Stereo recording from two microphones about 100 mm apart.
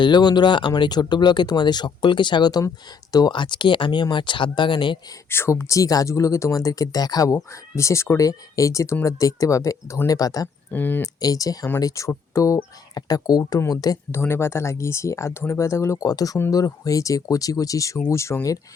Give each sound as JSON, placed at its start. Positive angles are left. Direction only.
{"t": 0.0, "sound": "speech", "side_deg": 45}
{"t": 5.3, "sound": "speech", "side_deg": 25}
{"t": 10.7, "sound": "speech", "side_deg": 20}
{"t": 11.0, "sound": "speech", "side_deg": 35}
{"t": 14.1, "sound": "speech", "side_deg": 25}